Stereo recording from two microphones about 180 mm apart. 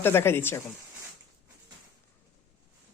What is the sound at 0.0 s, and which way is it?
Speech, 15° left (ahead or behind).